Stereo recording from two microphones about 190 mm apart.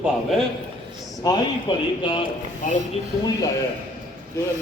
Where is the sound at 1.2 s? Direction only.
25° left (ahead or behind).